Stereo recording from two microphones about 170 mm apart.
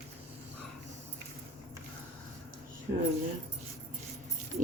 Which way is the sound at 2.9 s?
80° right.